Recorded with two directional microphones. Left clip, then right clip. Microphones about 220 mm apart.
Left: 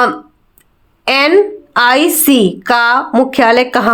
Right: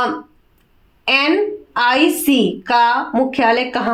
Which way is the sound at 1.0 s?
45° left (ahead or behind).